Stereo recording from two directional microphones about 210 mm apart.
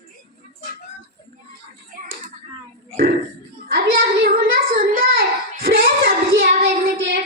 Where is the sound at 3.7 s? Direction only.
50° right (ahead or behind).